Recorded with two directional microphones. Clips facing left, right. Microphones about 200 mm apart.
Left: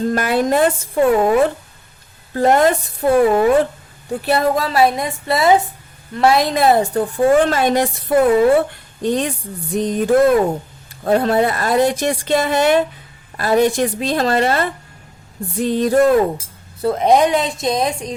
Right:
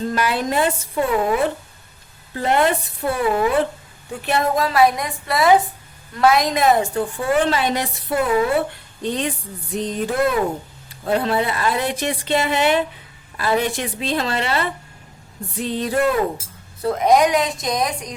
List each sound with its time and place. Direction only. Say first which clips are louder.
0.1 s speech: left 5 dB; 50° left (ahead or behind)
2.3 s speech: left 5 dB; 45° left (ahead or behind)
4.3 s a woman's voice: left 3 dB; 35° left (ahead or behind)
16.8 s speech: left 2 dB; 30° left (ahead or behind)